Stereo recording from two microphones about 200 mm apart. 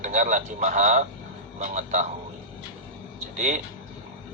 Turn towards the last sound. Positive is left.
turn(degrees=-35)  # may be behind; listen again after turning